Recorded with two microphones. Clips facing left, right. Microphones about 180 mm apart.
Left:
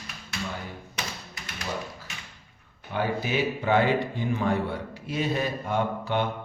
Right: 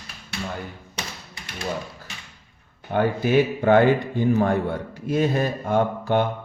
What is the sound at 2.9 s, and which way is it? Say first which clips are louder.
A man's voice: right 7 dB; 50° right (ahead or behind).